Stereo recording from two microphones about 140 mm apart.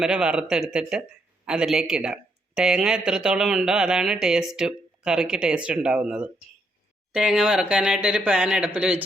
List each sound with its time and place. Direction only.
0.0 s speech: 5° right (ahead or behind)